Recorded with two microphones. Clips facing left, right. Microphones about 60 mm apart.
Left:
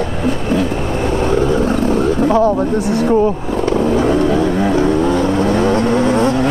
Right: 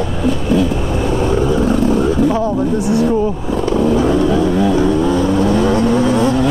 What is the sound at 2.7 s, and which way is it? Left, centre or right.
Speech, left.